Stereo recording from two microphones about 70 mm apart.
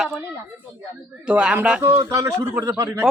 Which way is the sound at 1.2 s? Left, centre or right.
Centre.